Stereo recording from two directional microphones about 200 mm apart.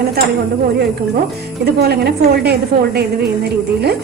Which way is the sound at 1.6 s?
55° right (ahead or behind).